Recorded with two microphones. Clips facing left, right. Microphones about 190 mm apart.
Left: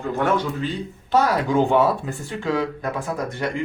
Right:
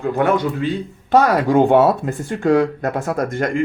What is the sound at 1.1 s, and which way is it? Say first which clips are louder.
Speech: right 5 dB; 65° right (ahead or behind).